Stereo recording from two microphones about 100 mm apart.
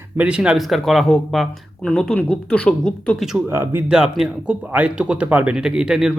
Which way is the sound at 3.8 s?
5° right (ahead or behind).